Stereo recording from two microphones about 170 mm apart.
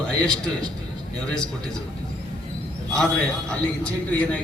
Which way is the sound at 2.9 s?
5° left (ahead or behind).